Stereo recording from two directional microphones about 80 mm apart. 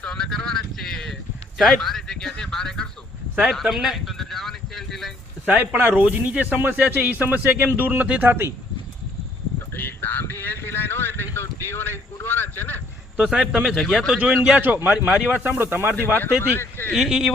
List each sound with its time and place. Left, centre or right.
0.0 s a sound: centre
1.5 s speech: centre
3.5 s a sound: centre
5.5 s speech: right
8.2 s speech: right
9.7 s a sound: left
13.1 s a man's voice: centre
13.7 s speech: centre
14.2 s a man's voice: centre
16.1 s speech: left
16.9 s speech: centre